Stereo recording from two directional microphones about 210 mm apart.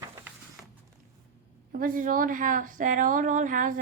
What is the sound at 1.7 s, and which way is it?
A woman's voice, 40° right (ahead or behind).